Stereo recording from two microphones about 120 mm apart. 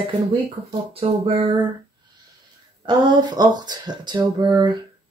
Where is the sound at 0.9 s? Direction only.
50° right (ahead or behind).